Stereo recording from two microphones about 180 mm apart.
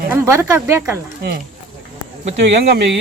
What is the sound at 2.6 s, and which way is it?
Speech, 65° right (ahead or behind).